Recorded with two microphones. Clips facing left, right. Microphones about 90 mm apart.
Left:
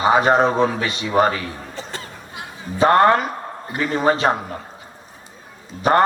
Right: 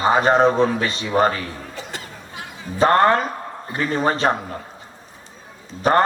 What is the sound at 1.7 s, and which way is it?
Music, 35° left (ahead or behind).